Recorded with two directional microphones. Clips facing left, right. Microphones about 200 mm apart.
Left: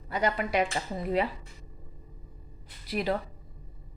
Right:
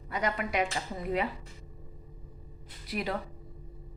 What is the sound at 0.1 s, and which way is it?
Speech, 30° left (ahead or behind).